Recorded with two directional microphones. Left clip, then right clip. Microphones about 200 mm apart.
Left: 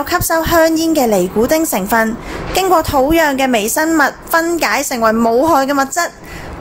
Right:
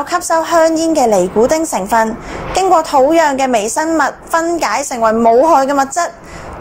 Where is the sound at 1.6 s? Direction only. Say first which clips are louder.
Right 1 dB; 10° left (ahead or behind).